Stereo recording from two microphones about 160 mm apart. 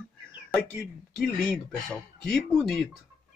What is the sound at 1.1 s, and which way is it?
Speech, centre (ahead or behind).